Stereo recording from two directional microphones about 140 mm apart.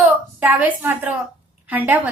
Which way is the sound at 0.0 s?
10° right (ahead or behind).